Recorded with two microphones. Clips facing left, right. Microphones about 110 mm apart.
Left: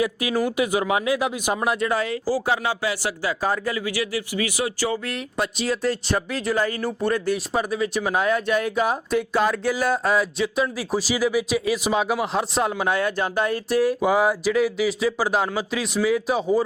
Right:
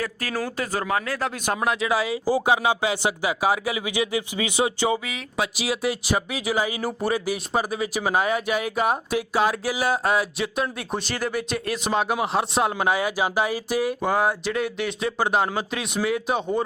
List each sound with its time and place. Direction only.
0.0 s speech: 15° left (ahead or behind); by 2.2 s 5° right (ahead or behind)
2.2 s speech: 20° right (ahead or behind)
5.0 s speech: 5° right (ahead or behind)